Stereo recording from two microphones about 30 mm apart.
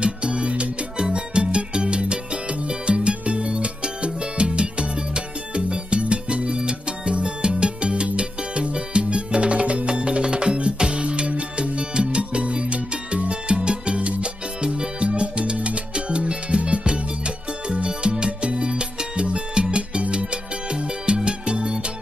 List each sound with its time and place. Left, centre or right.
0.0 s music: right
10.9 s music: right